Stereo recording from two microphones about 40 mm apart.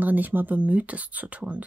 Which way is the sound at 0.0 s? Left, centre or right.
Right.